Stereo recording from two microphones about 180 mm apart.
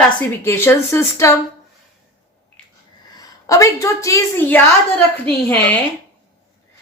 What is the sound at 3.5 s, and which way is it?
Speech, 20° left (ahead or behind).